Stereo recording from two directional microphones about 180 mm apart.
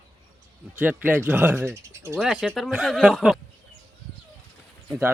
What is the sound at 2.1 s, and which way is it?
Speech, centre (ahead or behind).